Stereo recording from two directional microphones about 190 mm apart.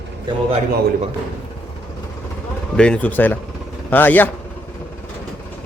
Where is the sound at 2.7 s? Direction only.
5° left (ahead or behind).